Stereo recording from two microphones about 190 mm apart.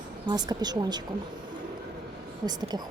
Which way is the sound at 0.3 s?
20° right (ahead or behind).